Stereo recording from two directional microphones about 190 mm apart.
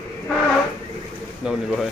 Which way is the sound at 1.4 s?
5° right (ahead or behind).